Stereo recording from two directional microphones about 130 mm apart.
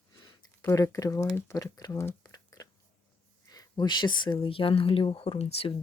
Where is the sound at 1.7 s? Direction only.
25° left (ahead or behind).